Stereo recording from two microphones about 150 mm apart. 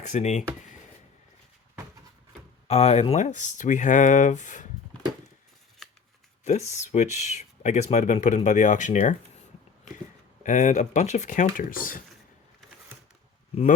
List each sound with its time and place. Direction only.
0.0 s speech: 50° left (ahead or behind)
2.6 s speech: 45° left (ahead or behind)
5.8 s shuffling cards: centre (ahead or behind)
6.4 s speech: 50° left (ahead or behind)
10.4 s speech: 55° left (ahead or behind)